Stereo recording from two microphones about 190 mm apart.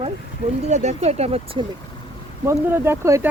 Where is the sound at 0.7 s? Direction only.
35° right (ahead or behind).